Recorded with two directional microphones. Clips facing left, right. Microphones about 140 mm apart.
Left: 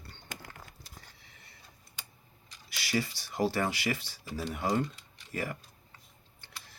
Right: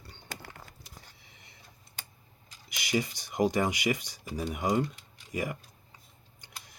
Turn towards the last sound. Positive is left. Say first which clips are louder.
# right 1 dB
turn(degrees=-15)  # may be behind; listen again after turning